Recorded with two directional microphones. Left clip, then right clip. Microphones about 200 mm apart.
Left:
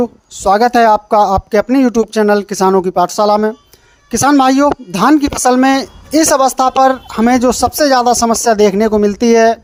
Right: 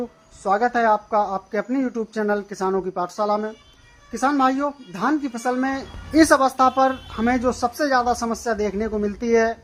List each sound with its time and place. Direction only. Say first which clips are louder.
0.0 s speech: left 13 dB; 40° left (ahead or behind)